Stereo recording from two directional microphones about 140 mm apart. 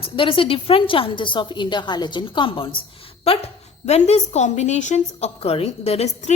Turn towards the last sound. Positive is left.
turn(degrees=55)  # may be behind; listen again after turning